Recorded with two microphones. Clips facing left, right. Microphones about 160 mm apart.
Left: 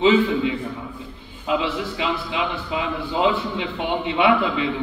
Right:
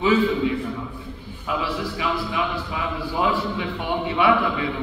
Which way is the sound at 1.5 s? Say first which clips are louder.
Left 3 dB; 20° left (ahead or behind).